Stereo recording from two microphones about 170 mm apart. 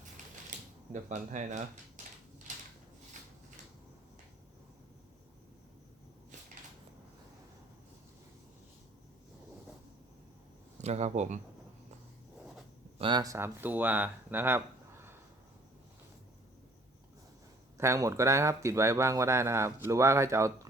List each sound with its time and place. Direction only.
1.0 s speech: 45° right (ahead or behind)
2.5 s drawer open or close: 45° right (ahead or behind)
10.8 s speech: 40° right (ahead or behind)
13.0 s speech: 25° right (ahead or behind)
17.7 s speech: 15° right (ahead or behind)